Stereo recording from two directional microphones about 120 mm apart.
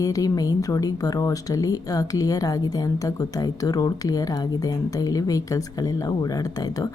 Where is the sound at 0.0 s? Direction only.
30° left (ahead or behind).